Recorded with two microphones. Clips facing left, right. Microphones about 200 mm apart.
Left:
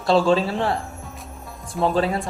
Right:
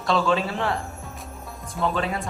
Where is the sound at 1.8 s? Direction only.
30° left (ahead or behind).